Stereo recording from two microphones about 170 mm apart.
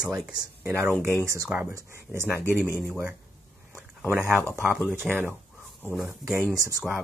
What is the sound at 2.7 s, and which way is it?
Speech, 10° right (ahead or behind).